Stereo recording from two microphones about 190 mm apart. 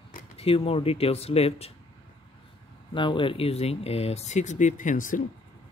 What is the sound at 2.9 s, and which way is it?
Speech, 25° left (ahead or behind).